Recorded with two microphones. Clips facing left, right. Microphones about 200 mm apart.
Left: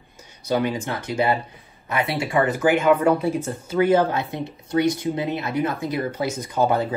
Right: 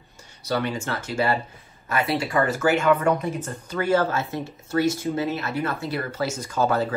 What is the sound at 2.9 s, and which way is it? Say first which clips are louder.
Speech: left 3 dB; 10° left (ahead or behind).